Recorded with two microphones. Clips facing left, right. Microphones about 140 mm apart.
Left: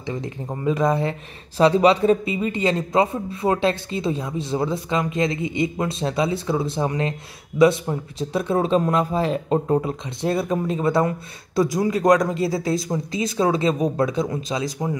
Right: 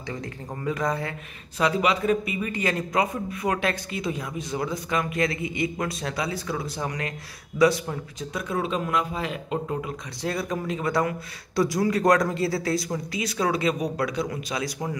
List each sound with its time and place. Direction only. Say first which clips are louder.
0.0 s a man's voice: left 5 dB; 20° left (ahead or behind)
10.2 s a man's voice: left 6 dB; 25° left (ahead or behind)